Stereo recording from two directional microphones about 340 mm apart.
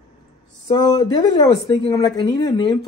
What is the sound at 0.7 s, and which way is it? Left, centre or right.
Speech, centre.